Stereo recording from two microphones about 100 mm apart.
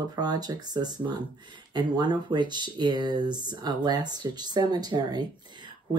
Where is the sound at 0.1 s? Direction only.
40° right (ahead or behind).